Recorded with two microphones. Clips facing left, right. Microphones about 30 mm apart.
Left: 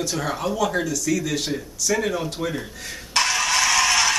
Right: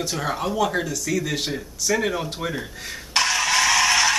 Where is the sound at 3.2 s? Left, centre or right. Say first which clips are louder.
Even; centre.